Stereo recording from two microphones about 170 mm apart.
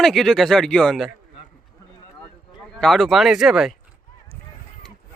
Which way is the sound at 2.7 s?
Centre (ahead or behind).